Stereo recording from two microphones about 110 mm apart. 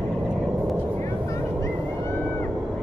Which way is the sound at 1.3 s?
25° left (ahead or behind).